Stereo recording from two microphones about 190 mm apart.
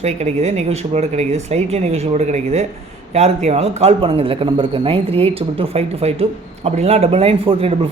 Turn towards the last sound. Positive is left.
turn(degrees=-30)  # may be behind; listen again after turning